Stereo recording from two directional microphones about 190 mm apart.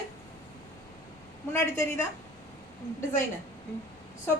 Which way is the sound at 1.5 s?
15° left (ahead or behind).